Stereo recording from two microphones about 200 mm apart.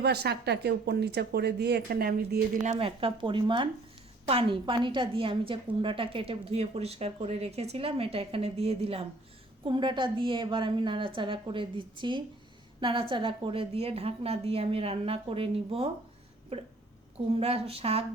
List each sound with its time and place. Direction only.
0.0 s speech: 55° right (ahead or behind)
2.6 s a woman's voice: 30° right (ahead or behind)